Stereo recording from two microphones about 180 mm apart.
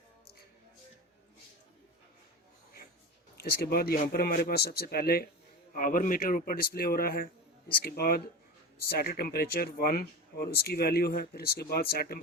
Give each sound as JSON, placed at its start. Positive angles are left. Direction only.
{"t": 3.7, "sound": "a man's voice", "side_deg": 55}